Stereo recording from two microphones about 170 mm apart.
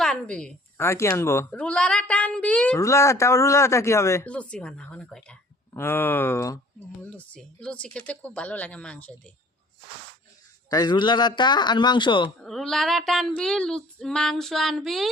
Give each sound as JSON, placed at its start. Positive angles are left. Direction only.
{"t": 0.0, "sound": "a woman's voice", "side_deg": 5}
{"t": 2.7, "sound": "a woman's voice", "side_deg": 20}
{"t": 10.7, "sound": "a man's voice", "side_deg": 25}
{"t": 12.4, "sound": "female singing", "side_deg": 0}